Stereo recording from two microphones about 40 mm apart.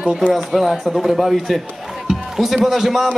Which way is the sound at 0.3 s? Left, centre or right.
Centre.